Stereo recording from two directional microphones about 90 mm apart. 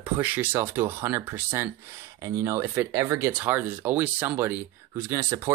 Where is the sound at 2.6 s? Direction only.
20° right (ahead or behind).